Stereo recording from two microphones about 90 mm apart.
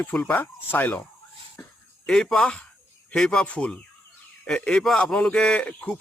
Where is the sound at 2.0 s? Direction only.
5° left (ahead or behind).